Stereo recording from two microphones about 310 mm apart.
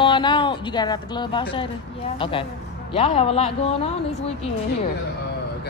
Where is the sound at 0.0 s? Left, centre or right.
Centre.